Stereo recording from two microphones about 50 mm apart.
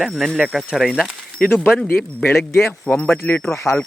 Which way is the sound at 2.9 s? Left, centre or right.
Centre.